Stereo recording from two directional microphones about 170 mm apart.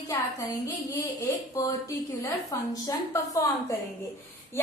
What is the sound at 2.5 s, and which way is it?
A woman's voice, 20° left (ahead or behind).